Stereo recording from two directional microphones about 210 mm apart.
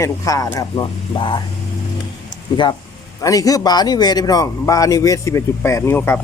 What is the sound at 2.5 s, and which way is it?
A man's voice, 20° left (ahead or behind).